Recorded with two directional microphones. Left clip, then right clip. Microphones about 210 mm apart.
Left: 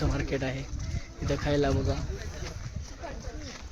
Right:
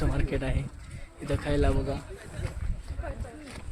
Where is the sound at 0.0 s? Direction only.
10° left (ahead or behind).